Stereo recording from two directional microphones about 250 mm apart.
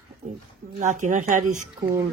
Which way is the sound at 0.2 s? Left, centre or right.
Right.